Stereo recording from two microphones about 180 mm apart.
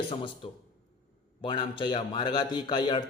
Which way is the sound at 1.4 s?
25° left (ahead or behind).